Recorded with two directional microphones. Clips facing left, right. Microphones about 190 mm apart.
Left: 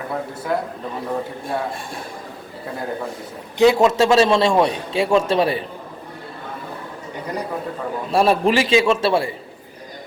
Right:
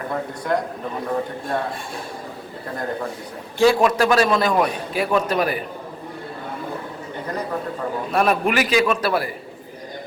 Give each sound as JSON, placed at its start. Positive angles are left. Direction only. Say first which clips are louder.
{"t": 0.1, "sound": "a man's voice", "louder": "right 1 dB", "side_deg": 5}
{"t": 3.6, "sound": "a man's voice", "louder": "left 2 dB", "side_deg": 20}
{"t": 8.1, "sound": "a man's voice", "louder": "left 3 dB", "side_deg": 30}